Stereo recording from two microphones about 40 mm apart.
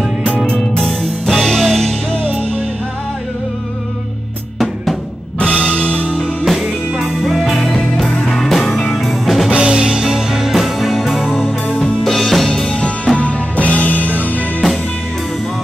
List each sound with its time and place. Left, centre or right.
0.6 s music: centre
5.4 s music: left
6.4 s music: centre
8.3 s music: centre
9.5 s music: right
9.8 s music: centre
12.8 s music: left
13.7 s music: left